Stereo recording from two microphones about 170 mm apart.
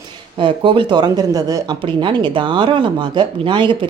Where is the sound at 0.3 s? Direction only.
30° right (ahead or behind).